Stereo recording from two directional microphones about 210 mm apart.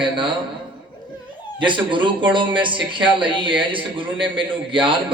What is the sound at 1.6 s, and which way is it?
Speech, 25° right (ahead or behind).